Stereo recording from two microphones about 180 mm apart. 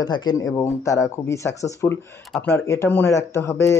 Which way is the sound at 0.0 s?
25° left (ahead or behind).